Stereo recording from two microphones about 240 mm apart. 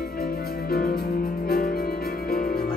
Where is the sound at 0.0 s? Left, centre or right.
Left.